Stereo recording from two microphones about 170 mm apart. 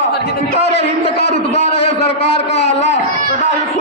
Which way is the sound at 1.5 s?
35° left (ahead or behind).